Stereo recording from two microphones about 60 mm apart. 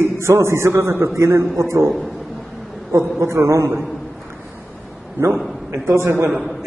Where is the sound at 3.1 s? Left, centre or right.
Right.